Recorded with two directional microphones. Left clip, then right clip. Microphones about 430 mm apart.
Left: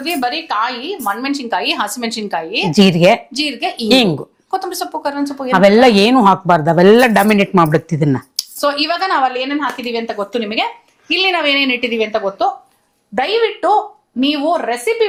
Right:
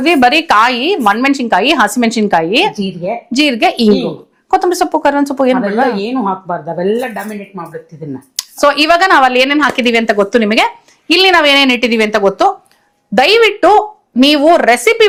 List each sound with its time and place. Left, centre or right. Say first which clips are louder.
0.0 s a woman's voice: right 10 dB; right
2.7 s speech: left 10 dB; left
3.3 s a woman's voice: right 8 dB; right
5.9 s speech: left 6 dB; left
8.5 s a woman's voice: right 8 dB; right
13.1 s a woman's voice: right 7 dB; right